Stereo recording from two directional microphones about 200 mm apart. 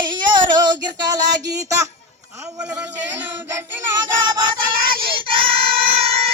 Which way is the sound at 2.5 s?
15° right (ahead or behind).